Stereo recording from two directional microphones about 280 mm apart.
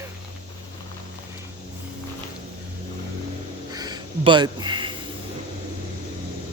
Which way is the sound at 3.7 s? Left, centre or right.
Centre.